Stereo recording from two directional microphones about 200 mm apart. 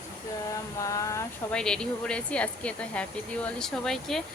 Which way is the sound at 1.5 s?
5° left (ahead or behind).